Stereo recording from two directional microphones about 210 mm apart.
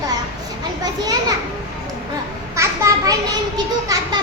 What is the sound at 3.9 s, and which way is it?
Speech, 15° right (ahead or behind).